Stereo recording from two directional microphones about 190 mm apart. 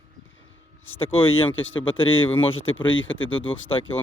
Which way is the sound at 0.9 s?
30° left (ahead or behind).